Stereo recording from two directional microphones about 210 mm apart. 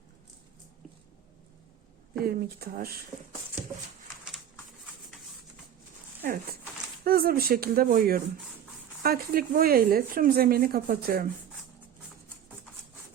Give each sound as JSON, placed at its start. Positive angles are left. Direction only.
{"t": 2.1, "sound": "speech", "side_deg": -45}
{"t": 6.2, "sound": "speech", "side_deg": -40}